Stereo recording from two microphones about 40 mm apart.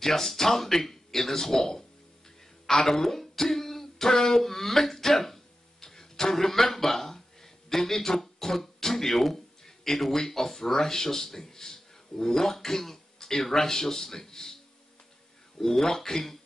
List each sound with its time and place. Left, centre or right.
0.0 s speech: centre